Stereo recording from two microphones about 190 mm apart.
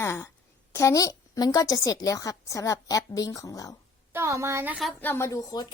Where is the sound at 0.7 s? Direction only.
15° left (ahead or behind).